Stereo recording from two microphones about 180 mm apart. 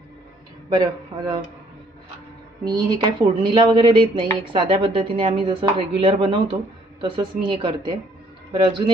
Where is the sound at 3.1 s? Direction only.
25° right (ahead or behind).